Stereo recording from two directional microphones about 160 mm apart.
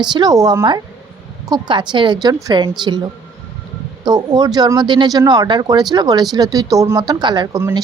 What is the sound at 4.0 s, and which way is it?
A woman's voice, 25° right (ahead or behind).